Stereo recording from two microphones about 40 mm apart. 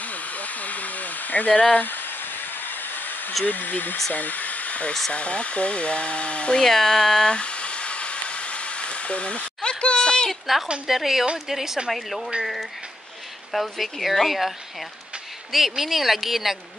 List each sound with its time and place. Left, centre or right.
0.0 s hair dryer: left
1.5 s speech: left
1.8 s a sound: left
3.4 s speech: left
6.6 s speech: centre
7.3 s a sound: left
10.9 s a woman's voice: centre
11.9 s speech: centre
13.5 s speech: centre
15.5 s speech: centre